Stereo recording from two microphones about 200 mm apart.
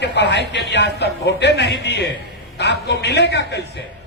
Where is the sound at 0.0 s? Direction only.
60° left (ahead or behind).